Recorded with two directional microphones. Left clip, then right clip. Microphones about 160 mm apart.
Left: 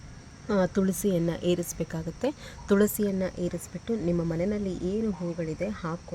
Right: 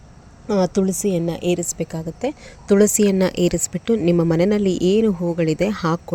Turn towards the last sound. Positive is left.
turn(degrees=-50)  # may be behind; listen again after turning